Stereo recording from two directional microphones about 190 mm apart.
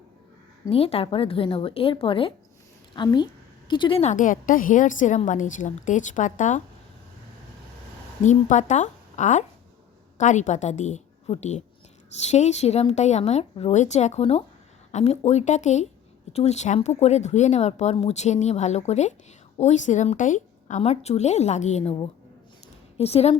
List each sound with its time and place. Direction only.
0.7 s a woman's voice: 30° left (ahead or behind)
8.2 s a woman's voice: 40° left (ahead or behind)